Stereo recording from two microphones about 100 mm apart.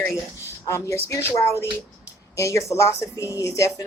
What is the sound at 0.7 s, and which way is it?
A woman's voice, 30° left (ahead or behind).